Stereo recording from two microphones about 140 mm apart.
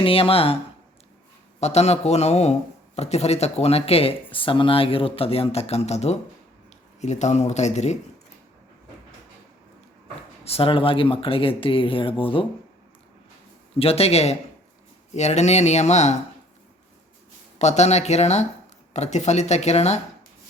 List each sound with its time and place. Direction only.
0.0 s speech: 40° left (ahead or behind)
10.4 s speech: 45° left (ahead or behind)
13.7 s speech: 45° left (ahead or behind)
17.6 s speech: 55° left (ahead or behind)